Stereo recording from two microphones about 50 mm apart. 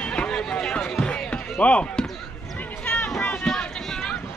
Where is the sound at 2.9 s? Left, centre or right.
Left.